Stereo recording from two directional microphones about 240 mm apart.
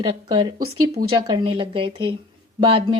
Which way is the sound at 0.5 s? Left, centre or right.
Right.